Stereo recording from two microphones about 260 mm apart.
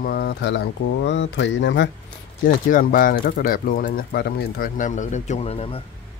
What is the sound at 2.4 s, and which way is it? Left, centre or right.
Speech, left.